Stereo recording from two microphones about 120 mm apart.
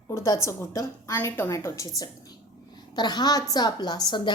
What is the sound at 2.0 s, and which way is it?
A woman's voice, 35° left (ahead or behind).